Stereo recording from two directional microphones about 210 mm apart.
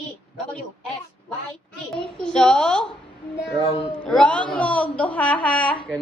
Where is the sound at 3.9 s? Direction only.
5° left (ahead or behind).